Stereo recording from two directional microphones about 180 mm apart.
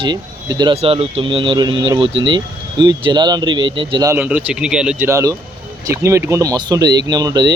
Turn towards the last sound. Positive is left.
turn(degrees=-25)  # may be behind; listen again after turning